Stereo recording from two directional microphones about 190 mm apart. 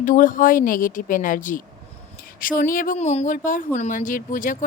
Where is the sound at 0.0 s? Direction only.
45° left (ahead or behind).